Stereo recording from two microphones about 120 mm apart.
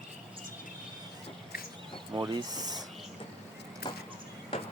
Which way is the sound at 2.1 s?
35° right (ahead or behind).